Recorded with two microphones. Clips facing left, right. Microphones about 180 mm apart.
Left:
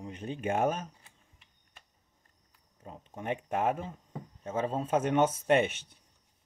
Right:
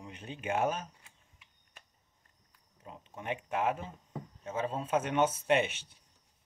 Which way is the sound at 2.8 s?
45° left (ahead or behind).